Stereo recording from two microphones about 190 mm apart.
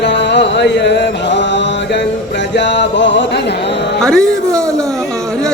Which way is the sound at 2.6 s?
70° left (ahead or behind).